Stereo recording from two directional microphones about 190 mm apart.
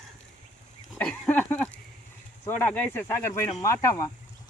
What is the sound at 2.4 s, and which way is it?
Speech, 10° left (ahead or behind).